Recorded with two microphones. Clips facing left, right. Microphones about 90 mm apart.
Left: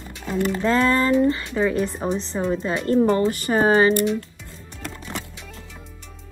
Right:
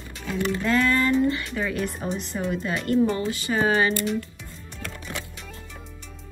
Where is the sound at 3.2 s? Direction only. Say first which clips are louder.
Left 5 dB; 45° left (ahead or behind).